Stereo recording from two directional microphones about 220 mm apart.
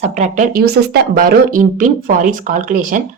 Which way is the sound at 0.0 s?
30° right (ahead or behind).